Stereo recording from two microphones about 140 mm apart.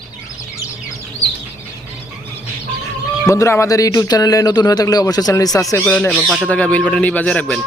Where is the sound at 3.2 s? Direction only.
20° left (ahead or behind).